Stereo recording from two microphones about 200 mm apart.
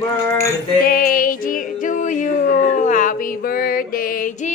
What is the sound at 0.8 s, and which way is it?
Music, 45° left (ahead or behind).